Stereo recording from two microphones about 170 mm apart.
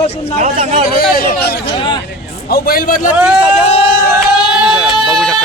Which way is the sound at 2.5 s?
60° left (ahead or behind).